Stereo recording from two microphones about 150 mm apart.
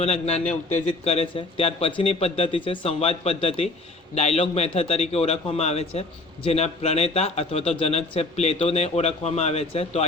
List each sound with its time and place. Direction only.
0.0 s a man's voice: 45° left (ahead or behind)